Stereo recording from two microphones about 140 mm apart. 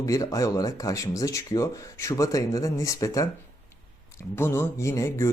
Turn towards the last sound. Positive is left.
turn(degrees=20)  # may be behind; listen again after turning